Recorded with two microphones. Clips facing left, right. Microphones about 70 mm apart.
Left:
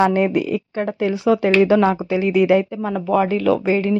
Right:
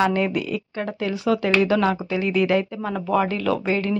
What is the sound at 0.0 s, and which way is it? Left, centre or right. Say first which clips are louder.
Speech: left 5 dB; left.